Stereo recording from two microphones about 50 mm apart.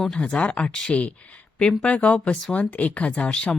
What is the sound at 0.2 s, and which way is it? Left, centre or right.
Speech, left.